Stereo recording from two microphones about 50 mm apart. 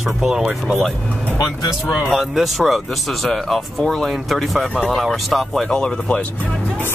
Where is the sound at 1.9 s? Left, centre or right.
Centre.